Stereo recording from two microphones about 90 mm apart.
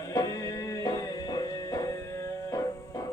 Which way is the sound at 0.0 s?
40° left (ahead or behind).